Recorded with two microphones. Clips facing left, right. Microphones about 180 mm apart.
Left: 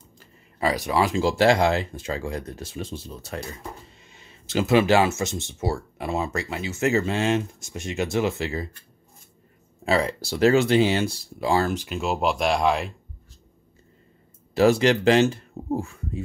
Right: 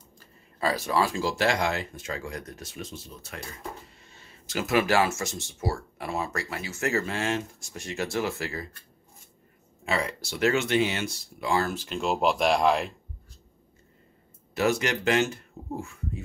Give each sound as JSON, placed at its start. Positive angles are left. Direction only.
{"t": 0.6, "sound": "speech", "side_deg": 15}
{"t": 4.0, "sound": "speech", "side_deg": 15}
{"t": 9.8, "sound": "speech", "side_deg": 35}
{"t": 11.7, "sound": "speech", "side_deg": 10}
{"t": 14.5, "sound": "speech", "side_deg": 30}